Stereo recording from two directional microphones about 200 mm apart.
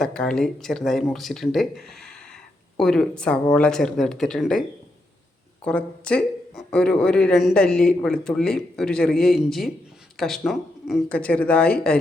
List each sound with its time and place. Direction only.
0.0 s speech: 5° left (ahead or behind)
5.6 s speech: 5° left (ahead or behind)